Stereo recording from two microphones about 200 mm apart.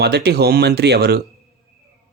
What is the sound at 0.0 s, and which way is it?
Speech, 55° right (ahead or behind).